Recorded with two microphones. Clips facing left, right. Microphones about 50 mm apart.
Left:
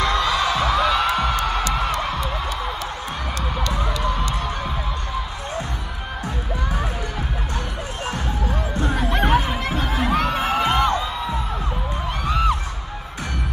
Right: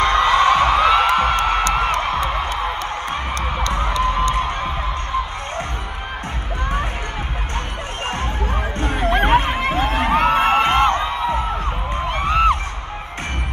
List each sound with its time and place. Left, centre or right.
0.0 s music: right
8.7 s music: right
9.1 s a sound: right